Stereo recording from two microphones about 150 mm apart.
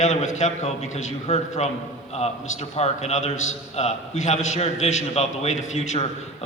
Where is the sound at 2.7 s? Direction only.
45° left (ahead or behind).